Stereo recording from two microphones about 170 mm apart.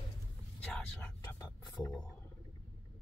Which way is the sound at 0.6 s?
10° left (ahead or behind).